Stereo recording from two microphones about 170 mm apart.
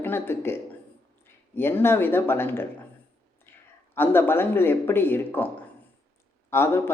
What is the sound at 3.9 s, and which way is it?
Speech, 15° left (ahead or behind).